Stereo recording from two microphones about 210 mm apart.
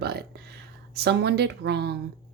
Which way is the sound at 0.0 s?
50° right (ahead or behind).